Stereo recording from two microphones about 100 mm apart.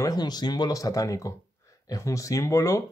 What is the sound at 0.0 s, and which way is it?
Speech, 40° left (ahead or behind).